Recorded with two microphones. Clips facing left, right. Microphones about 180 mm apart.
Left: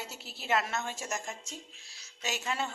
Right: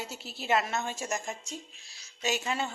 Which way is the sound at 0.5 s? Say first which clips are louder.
Right 2 dB; 15° right (ahead or behind).